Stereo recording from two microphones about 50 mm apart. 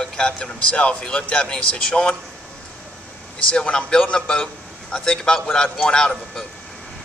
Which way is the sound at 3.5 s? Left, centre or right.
Centre.